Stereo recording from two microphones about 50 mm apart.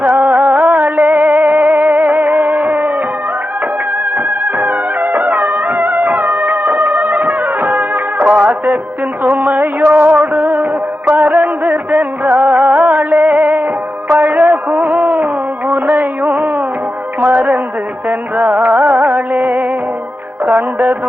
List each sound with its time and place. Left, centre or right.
0.0 s music: right
4.5 s music: right
8.2 s music: right
9.2 s music: right